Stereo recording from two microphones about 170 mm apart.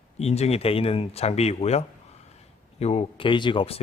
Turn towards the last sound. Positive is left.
turn(degrees=35)  # may be behind; listen again after turning